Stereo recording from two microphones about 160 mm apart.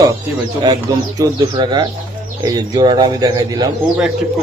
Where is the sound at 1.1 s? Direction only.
25° right (ahead or behind).